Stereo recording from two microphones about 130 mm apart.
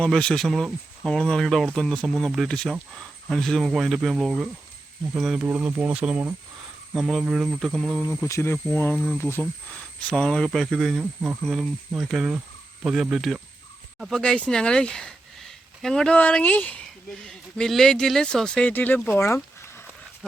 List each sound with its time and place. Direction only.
0.0 s speech: 5° left (ahead or behind)
5.4 s speech: 15° right (ahead or behind); by 8.0 s 5° left (ahead or behind)
8.3 s speech: 15° left (ahead or behind); by 11.0 s centre (ahead or behind)
11.0 s speech: 15° right (ahead or behind)
11.4 s speech: centre (ahead or behind); by 19.8 s 20° left (ahead or behind)